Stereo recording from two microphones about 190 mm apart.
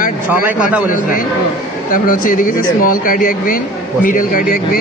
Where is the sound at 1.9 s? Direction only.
45° left (ahead or behind).